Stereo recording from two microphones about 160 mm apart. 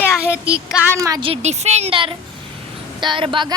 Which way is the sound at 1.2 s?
40° right (ahead or behind).